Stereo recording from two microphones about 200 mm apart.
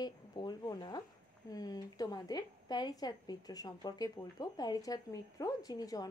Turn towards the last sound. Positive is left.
turn(degrees=20)  # may be behind; listen again after turning